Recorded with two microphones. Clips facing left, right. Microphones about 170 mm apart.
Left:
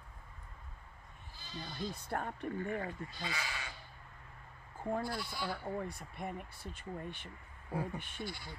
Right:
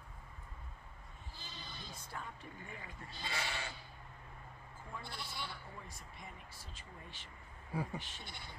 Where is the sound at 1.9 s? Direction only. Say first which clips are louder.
Left 8 dB; 60° left (ahead or behind).